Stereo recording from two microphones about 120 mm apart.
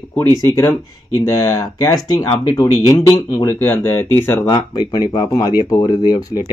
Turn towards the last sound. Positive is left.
turn(degrees=35)  # may be behind; listen again after turning